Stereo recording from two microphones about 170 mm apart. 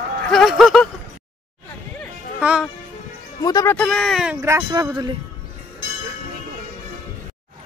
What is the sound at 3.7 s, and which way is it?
Speech, 5° left (ahead or behind).